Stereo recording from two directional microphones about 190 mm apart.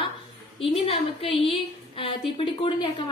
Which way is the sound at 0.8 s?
30° left (ahead or behind).